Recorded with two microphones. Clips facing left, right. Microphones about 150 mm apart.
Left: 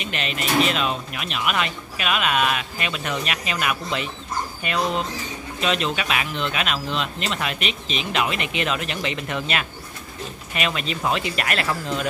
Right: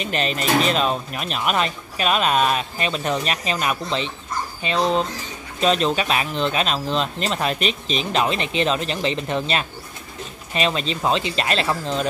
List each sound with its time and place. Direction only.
0.0 s speech: 35° right (ahead or behind)